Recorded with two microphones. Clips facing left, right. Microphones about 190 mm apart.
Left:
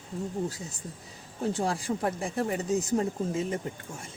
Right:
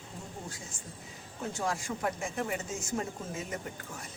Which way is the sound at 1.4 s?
30° left (ahead or behind).